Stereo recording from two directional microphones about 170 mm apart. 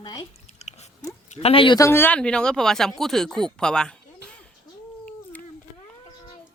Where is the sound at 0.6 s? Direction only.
40° left (ahead or behind).